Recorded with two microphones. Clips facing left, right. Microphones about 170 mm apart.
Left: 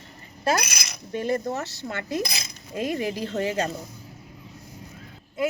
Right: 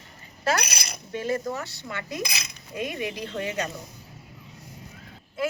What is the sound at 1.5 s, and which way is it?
Speech, 25° left (ahead or behind).